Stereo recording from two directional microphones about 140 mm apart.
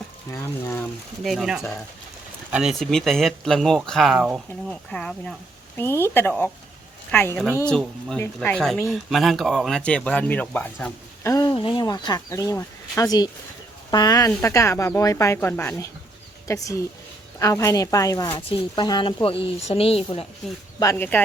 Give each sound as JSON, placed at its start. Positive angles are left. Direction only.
{"t": 0.3, "sound": "speech", "side_deg": 15}
{"t": 1.2, "sound": "speech", "side_deg": 0}
{"t": 11.5, "sound": "speech", "side_deg": 35}
{"t": 18.3, "sound": "speech", "side_deg": 40}
{"t": 20.9, "sound": "speech", "side_deg": 15}